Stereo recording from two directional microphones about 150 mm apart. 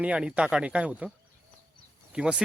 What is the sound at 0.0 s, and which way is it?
Speech, 10° right (ahead or behind).